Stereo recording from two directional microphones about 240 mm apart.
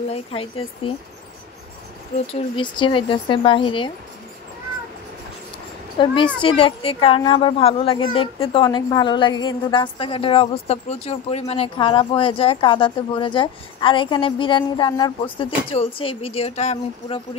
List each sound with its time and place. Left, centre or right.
0.1 s speech: left
2.3 s speech: left
5.9 s speech: left